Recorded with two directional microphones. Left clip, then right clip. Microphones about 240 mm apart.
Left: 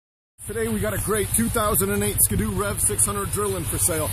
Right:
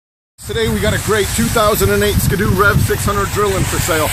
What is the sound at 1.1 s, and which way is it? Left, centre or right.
Speech, left.